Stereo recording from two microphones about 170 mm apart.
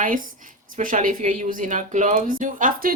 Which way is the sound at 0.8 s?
50° right (ahead or behind).